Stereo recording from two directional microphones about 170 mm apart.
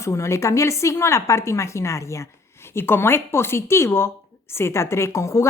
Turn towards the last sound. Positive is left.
turn(degrees=15)  # may be behind; listen again after turning